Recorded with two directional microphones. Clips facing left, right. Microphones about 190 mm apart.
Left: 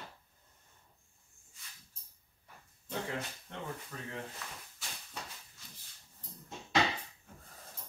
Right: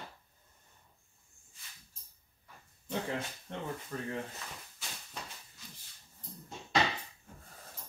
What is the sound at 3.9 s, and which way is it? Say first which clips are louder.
Speech: right 6 dB; 40° right (ahead or behind).